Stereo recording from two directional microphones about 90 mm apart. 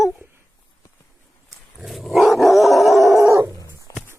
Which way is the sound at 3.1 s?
35° right (ahead or behind).